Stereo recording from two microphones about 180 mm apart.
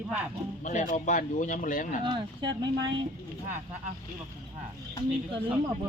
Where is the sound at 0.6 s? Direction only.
45° left (ahead or behind).